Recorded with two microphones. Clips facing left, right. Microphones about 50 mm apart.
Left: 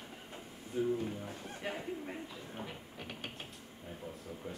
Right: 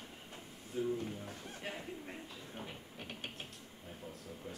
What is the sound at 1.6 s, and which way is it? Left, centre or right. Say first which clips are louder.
Speech: left 5 dB; centre.